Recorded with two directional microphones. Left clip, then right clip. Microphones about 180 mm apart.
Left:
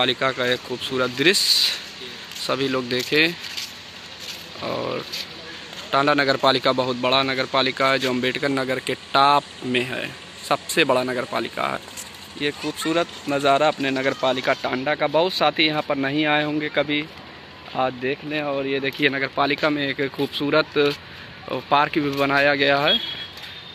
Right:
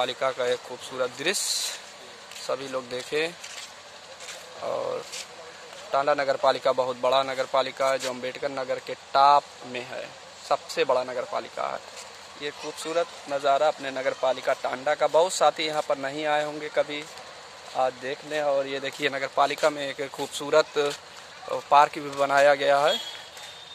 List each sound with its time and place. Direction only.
0.0 s speech: 10° right (ahead or behind)
4.6 s speech: 5° right (ahead or behind)
14.9 s speech: 10° right (ahead or behind)
18.0 s speech: 25° right (ahead or behind)
21.5 s speech: 5° right (ahead or behind); by 22.9 s 20° right (ahead or behind)